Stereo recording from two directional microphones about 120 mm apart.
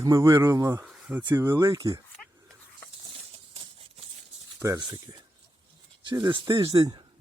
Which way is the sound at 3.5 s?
55° right (ahead or behind).